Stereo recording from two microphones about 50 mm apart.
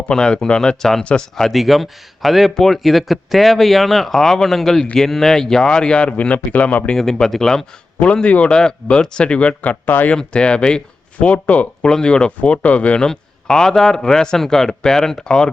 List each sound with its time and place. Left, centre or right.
0.1 s speech: centre; by 6.8 s left
6.9 s speech: centre
7.9 s speech: left
10.2 s speech: left
11.3 s speech: left
11.8 s speech: centre
13.1 s speech: centre